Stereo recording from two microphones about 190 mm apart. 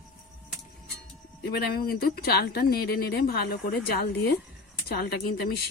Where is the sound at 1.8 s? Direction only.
50° left (ahead or behind).